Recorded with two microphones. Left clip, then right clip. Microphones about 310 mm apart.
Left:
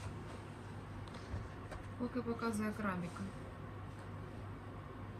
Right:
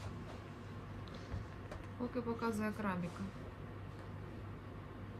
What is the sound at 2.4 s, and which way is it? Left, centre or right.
Speech, right.